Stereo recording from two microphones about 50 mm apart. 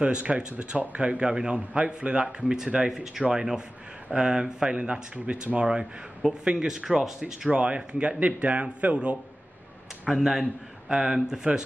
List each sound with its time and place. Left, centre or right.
0.0 s a man's voice: right
6.7 s a man's voice: centre
10.0 s speech: centre